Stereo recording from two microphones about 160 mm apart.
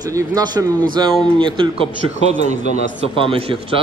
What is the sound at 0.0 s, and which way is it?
A man's voice, 20° right (ahead or behind).